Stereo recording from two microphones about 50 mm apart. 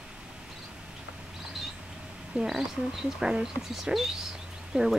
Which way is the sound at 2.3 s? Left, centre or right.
Centre.